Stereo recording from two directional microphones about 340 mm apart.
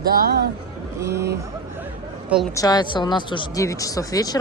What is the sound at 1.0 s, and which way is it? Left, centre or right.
Speech, centre.